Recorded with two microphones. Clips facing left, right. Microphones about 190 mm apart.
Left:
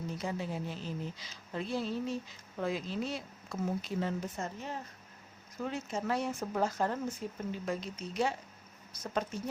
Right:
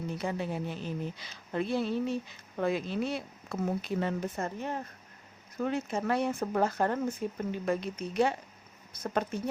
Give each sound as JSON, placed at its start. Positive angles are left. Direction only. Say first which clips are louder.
{"t": 0.2, "sound": "a woman's voice", "louder": "right 4 dB", "side_deg": -60}